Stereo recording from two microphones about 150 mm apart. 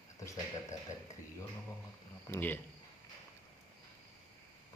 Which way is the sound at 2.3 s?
15° left (ahead or behind).